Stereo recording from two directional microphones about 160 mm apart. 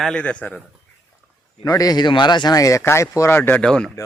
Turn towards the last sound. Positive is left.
turn(degrees=5)  # may be behind; listen again after turning